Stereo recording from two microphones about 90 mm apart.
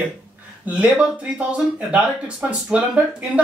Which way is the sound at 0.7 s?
10° right (ahead or behind).